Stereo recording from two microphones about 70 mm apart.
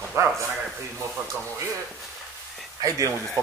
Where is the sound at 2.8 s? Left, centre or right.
Right.